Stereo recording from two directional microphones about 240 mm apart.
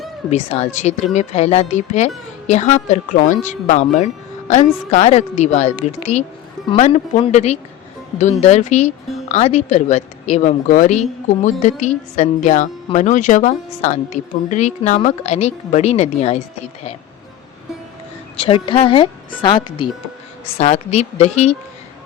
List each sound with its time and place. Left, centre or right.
0.3 s a woman's voice: left
18.3 s a woman's voice: left